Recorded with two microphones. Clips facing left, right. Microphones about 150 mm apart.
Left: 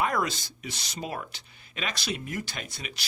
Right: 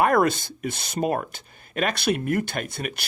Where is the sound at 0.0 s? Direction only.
55° right (ahead or behind).